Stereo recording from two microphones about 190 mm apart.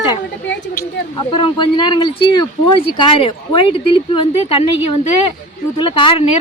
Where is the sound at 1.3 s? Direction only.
25° left (ahead or behind).